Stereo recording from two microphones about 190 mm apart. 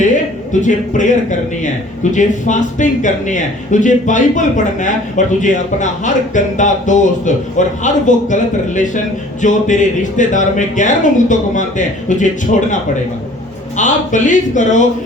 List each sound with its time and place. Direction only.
0.6 s speech: 40° left (ahead or behind)
13.7 s speech: 40° left (ahead or behind)